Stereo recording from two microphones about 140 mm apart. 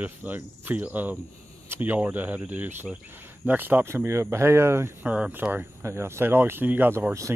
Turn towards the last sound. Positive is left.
turn(degrees=-20)  # may be behind; listen again after turning